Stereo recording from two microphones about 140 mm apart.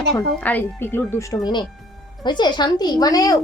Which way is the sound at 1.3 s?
30° left (ahead or behind).